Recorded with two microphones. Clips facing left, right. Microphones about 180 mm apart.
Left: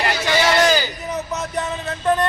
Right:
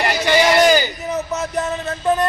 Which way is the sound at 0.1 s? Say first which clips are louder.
Right 4 dB; 15° right (ahead or behind).